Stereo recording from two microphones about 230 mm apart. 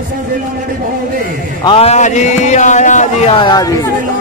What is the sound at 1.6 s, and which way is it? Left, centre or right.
A man's voice, left.